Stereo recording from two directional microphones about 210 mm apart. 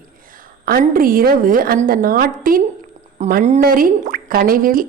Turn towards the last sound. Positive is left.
turn(degrees=-40)  # may be behind; listen again after turning